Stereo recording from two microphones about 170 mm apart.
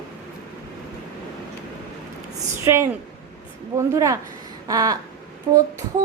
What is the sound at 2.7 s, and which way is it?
Speech, 15° right (ahead or behind).